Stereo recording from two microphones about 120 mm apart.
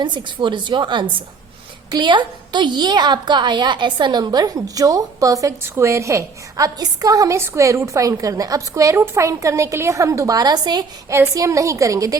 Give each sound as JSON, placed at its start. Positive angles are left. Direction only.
{"t": 0.0, "sound": "a woman's voice", "side_deg": -40}
{"t": 11.1, "sound": "a woman's voice", "side_deg": -25}